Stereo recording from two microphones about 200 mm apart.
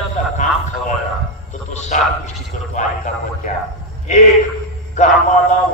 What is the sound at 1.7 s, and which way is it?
A man's voice, 35° left (ahead or behind).